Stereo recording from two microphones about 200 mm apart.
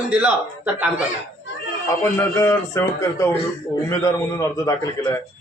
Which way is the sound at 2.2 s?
15° left (ahead or behind).